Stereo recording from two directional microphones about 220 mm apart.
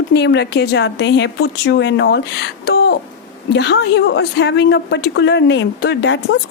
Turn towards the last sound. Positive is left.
turn(degrees=55)  # may be behind; listen again after turning